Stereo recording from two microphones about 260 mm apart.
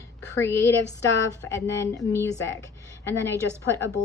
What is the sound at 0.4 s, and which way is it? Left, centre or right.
A woman's voice, centre.